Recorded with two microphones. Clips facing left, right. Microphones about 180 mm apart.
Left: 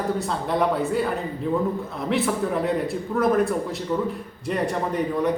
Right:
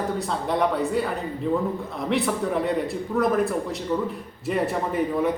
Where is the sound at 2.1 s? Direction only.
Centre (ahead or behind).